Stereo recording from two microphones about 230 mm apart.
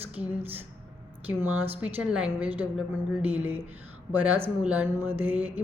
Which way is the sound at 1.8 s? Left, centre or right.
Centre.